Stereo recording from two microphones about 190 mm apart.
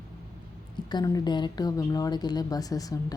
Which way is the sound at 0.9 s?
20° left (ahead or behind).